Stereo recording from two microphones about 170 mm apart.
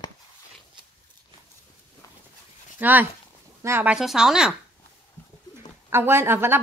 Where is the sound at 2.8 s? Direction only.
10° right (ahead or behind).